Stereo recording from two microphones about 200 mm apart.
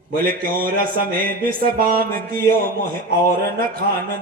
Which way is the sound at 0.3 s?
45° right (ahead or behind).